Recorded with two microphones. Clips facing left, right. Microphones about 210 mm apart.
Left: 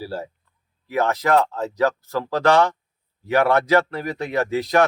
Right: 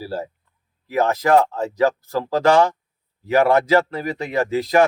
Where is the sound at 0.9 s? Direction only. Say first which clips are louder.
Right 3 dB; 10° right (ahead or behind).